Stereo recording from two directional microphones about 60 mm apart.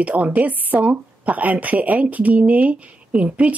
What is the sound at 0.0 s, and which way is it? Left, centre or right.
A woman's voice, right.